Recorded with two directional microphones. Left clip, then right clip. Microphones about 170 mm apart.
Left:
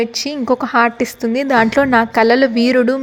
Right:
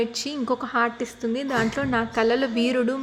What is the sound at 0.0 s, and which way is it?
Speech, 35° left (ahead or behind).